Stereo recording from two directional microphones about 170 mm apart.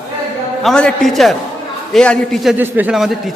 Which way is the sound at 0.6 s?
5° left (ahead or behind).